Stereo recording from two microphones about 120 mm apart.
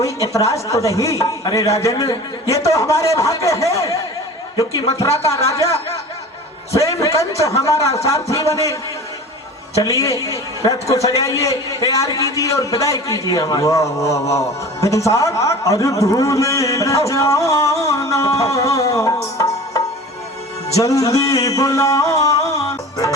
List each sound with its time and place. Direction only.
0.0 s a man's voice: 25° left (ahead or behind)
5.3 s a man's voice: 25° left (ahead or behind)
6.7 s a man's voice: 25° left (ahead or behind)
9.8 s a man's voice: 25° left (ahead or behind)